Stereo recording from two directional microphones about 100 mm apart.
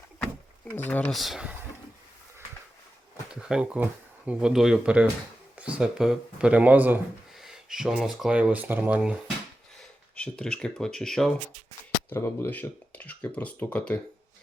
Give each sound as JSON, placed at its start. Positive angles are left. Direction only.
{"t": 0.2, "sound": "a sound", "side_deg": 15}
{"t": 1.1, "sound": "speech", "side_deg": 0}
{"t": 3.5, "sound": "speech", "side_deg": -10}
{"t": 7.3, "sound": "speech", "side_deg": -5}
{"t": 10.2, "sound": "speech", "side_deg": 10}
{"t": 12.1, "sound": "speech", "side_deg": 25}